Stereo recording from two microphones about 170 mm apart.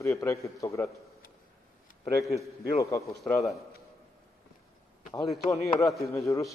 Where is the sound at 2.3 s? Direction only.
20° left (ahead or behind).